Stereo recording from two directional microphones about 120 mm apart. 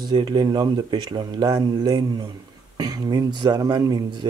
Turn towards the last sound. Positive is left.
turn(degrees=-35)  # may be behind; listen again after turning